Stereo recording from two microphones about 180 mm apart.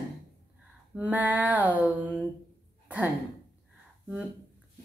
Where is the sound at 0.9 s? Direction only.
10° right (ahead or behind).